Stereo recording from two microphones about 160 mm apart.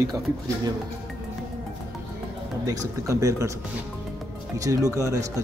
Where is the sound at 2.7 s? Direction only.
20° right (ahead or behind).